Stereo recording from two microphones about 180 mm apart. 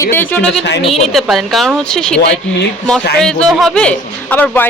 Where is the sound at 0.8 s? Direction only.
35° left (ahead or behind).